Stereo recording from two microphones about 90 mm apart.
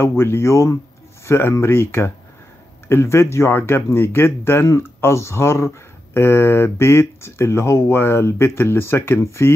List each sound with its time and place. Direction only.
0.2 s speech: 30° left (ahead or behind)